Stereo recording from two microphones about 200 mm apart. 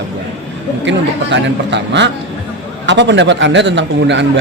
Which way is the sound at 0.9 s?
65° right (ahead or behind).